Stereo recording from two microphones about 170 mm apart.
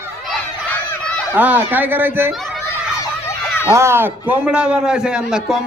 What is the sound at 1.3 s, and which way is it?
A man's voice, 10° right (ahead or behind).